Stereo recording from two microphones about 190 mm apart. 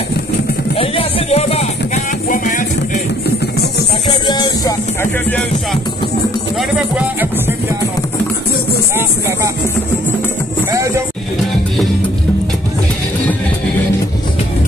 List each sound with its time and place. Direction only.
0.7 s music: 30° left (ahead or behind)
2.2 s music: 45° left (ahead or behind)
4.3 s music: 20° left (ahead or behind)